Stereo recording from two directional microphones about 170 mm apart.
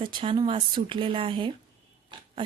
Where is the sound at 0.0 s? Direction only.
30° right (ahead or behind).